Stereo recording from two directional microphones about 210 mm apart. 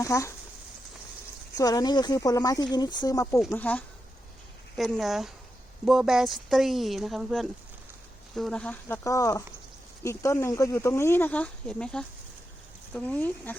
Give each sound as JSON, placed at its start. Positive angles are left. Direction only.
{"t": 0.0, "sound": "speech", "side_deg": 15}
{"t": 1.5, "sound": "speech", "side_deg": 15}